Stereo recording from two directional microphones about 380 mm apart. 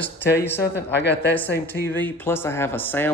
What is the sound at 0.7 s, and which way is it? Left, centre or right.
Speech, left.